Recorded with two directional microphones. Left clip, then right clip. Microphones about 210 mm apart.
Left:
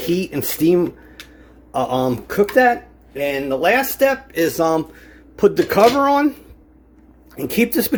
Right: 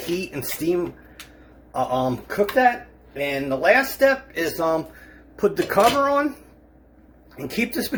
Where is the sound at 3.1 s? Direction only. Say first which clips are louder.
Left 4 dB; 50° left (ahead or behind).